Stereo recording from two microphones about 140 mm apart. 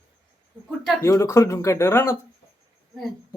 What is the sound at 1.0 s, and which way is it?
Speech, 20° left (ahead or behind).